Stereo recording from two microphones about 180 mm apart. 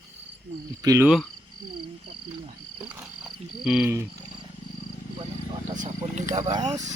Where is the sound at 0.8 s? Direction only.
15° right (ahead or behind).